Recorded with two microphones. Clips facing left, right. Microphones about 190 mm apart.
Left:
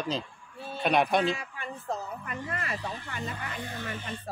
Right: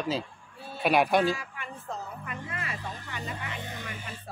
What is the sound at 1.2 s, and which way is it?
Speech, 30° left (ahead or behind).